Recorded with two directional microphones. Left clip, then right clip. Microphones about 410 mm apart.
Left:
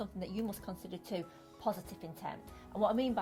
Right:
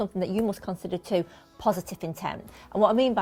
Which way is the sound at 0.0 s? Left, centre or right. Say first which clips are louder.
Right 13 dB; right.